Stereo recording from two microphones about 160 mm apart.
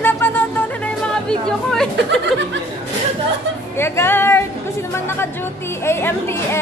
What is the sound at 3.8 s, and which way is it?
Speech, 15° left (ahead or behind).